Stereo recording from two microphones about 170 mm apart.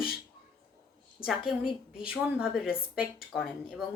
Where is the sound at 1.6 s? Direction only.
5° right (ahead or behind).